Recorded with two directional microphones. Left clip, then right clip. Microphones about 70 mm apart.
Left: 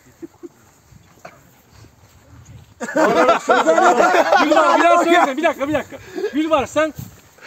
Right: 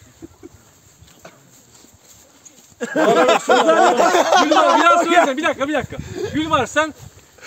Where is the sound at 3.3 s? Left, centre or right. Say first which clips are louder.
Even; right.